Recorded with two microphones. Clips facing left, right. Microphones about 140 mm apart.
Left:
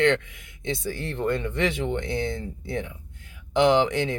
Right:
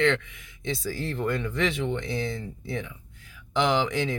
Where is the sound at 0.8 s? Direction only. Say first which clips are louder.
Left 2 dB; 25° left (ahead or behind).